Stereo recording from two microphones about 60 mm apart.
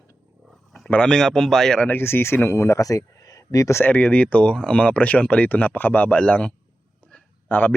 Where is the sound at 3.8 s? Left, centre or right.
Left.